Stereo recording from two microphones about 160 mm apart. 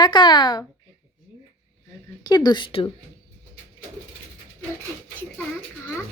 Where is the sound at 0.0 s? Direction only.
25° left (ahead or behind).